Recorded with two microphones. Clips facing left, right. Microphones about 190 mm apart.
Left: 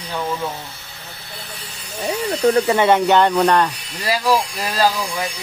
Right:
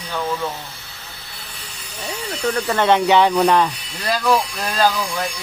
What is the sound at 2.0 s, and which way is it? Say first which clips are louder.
Speech: left 7 dB; 35° left (ahead or behind).